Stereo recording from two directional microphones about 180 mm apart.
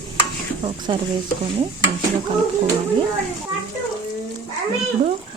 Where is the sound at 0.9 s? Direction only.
25° right (ahead or behind).